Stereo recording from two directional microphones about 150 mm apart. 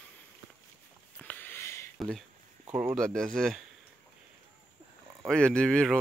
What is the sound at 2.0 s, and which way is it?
Speech, centre (ahead or behind).